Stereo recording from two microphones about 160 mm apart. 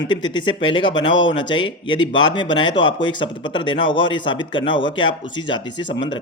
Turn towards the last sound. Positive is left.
turn(degrees=30)  # may be behind; listen again after turning